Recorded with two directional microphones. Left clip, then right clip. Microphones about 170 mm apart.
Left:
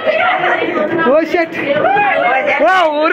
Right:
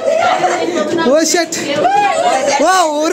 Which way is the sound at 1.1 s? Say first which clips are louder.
Right 1 dB; 65° right (ahead or behind).